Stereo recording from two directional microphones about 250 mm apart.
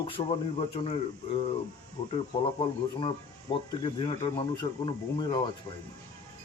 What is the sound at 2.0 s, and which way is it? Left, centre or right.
Speech, centre.